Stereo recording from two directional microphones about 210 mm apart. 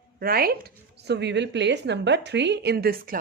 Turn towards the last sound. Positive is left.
turn(degrees=-45)  # may be behind; listen again after turning